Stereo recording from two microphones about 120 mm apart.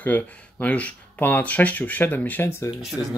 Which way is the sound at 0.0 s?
15° left (ahead or behind).